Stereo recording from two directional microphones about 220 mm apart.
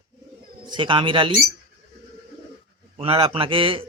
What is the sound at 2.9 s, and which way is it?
Speech, 25° right (ahead or behind).